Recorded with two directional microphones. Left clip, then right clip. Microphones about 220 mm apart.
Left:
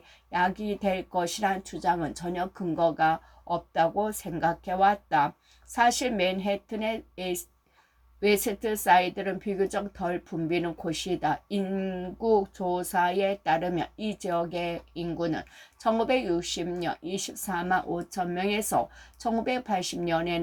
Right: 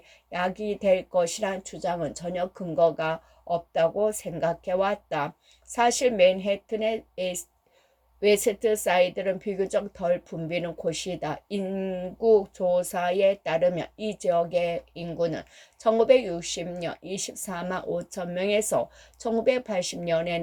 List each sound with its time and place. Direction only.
0.3 s a woman's voice: 10° right (ahead or behind)